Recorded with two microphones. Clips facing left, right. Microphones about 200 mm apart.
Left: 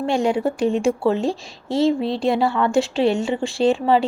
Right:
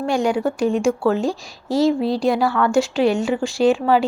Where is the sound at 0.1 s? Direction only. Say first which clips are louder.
Right 1 dB; 30° left (ahead or behind).